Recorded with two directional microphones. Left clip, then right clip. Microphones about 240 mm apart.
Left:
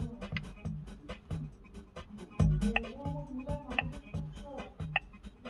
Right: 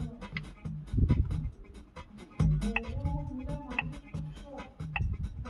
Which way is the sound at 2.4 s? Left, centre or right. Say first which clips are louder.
Even; left.